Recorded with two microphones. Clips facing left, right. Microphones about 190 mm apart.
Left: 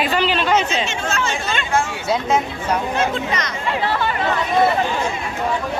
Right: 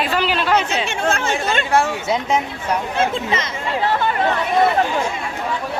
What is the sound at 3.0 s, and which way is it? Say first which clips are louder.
Speech: right 1 dB; 25° right (ahead or behind).